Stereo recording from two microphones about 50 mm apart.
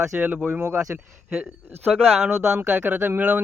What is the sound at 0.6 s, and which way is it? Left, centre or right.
Speech, right.